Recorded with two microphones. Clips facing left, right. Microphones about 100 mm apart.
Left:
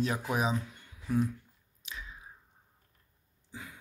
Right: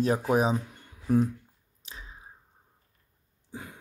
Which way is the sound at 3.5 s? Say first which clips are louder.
Right 4 dB; 45° right (ahead or behind).